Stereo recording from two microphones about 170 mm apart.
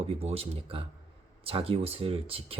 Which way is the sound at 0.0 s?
35° right (ahead or behind).